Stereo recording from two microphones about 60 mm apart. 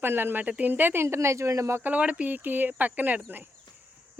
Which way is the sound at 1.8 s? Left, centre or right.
Right.